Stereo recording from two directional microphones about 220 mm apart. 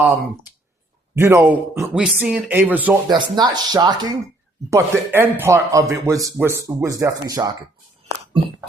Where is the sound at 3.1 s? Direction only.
20° right (ahead or behind).